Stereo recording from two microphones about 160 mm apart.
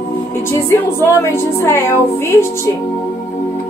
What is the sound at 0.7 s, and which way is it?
A woman's voice, 15° left (ahead or behind).